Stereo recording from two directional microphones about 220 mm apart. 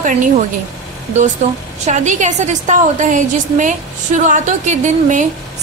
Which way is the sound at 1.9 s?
35° right (ahead or behind).